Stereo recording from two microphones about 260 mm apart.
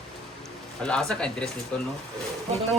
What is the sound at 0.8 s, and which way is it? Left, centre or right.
Speech, centre.